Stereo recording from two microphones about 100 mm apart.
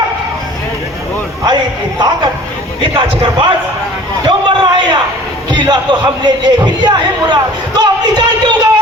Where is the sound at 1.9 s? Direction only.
40° right (ahead or behind).